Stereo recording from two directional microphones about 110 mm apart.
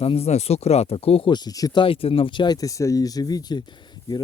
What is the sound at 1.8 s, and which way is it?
Speech, 55° left (ahead or behind).